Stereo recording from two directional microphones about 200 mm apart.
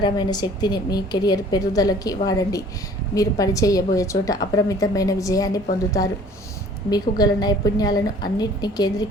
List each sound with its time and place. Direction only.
0.0 s a woman's voice: 20° left (ahead or behind)
6.9 s a woman's voice: 20° left (ahead or behind)